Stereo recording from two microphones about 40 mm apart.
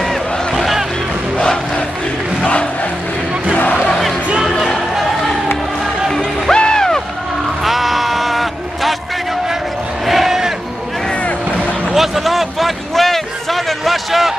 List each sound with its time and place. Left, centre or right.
0.6 s music: centre
6.1 s music: centre
7.6 s bleat: centre
10.0 s crowd: centre
11.9 s a sound: centre